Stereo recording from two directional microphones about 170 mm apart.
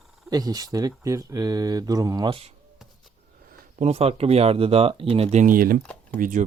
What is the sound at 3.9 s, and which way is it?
Speech, 35° right (ahead or behind).